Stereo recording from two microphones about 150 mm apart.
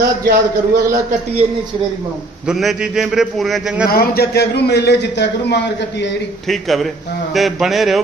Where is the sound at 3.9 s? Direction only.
90° left.